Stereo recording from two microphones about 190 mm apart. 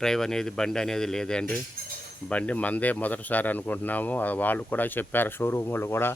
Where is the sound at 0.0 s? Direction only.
5° left (ahead or behind).